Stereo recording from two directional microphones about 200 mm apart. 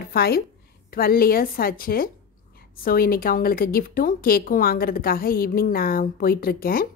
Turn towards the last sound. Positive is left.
turn(degrees=45)  # may be behind; listen again after turning